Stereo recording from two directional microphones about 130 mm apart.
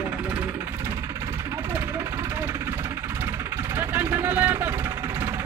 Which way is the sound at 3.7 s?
15° right (ahead or behind).